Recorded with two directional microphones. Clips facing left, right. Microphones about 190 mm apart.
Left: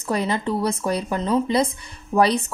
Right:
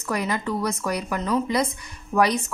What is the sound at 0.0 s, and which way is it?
Speech, 30° left (ahead or behind).